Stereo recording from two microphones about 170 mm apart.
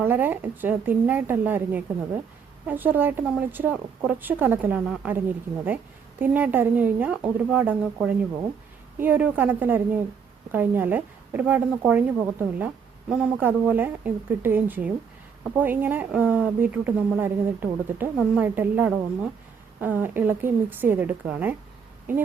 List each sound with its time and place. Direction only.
0.0 s a woman's voice: 10° right (ahead or behind)